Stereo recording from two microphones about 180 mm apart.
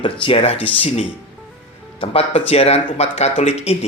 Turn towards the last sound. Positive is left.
turn(degrees=35)  # may be behind; listen again after turning